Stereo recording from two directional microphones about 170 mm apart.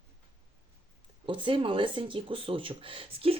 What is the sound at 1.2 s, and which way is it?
Speech, 30° right (ahead or behind).